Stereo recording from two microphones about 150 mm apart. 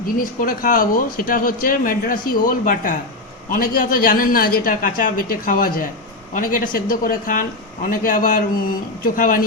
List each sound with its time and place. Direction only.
0.0 s speech: 65° left (ahead or behind)